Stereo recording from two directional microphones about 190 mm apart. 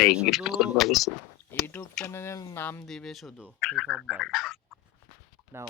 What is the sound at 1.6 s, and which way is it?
Speech, 10° left (ahead or behind).